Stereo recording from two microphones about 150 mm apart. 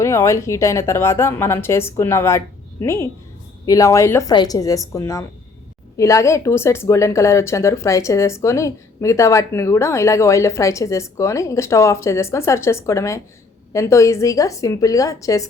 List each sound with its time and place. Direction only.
0.0 s a woman's voice: 20° left (ahead or behind)